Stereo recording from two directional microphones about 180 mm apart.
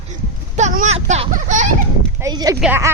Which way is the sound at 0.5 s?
45° right (ahead or behind).